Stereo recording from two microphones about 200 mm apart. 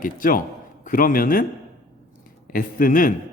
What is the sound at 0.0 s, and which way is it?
Speech, 45° left (ahead or behind).